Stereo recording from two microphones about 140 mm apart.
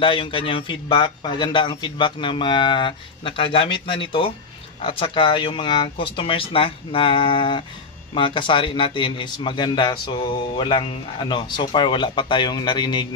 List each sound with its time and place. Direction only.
0.0 s a man's voice: 35° left (ahead or behind)